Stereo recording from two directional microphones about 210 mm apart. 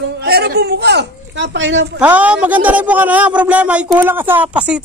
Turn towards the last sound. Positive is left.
turn(degrees=-5)  # may be behind; listen again after turning